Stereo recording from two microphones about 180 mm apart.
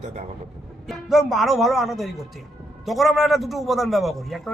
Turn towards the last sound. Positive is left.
turn(degrees=0)  # may be behind; listen again after turning